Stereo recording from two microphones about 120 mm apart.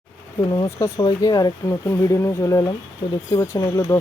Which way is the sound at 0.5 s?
30° left (ahead or behind).